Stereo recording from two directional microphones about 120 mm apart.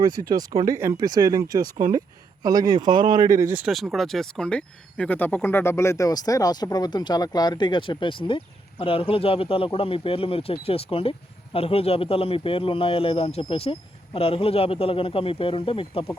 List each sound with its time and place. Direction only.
0.0 s speech: 35° right (ahead or behind)
3.9 s speech: centre (ahead or behind); by 16.0 s 50° left (ahead or behind)